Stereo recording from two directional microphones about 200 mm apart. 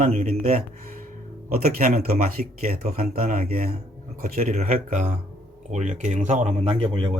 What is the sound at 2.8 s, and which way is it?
Speech, 50° right (ahead or behind).